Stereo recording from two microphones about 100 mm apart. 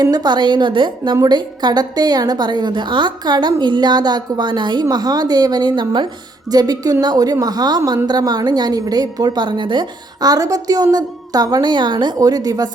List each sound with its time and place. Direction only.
0.0 s a woman's voice: 45° right (ahead or behind)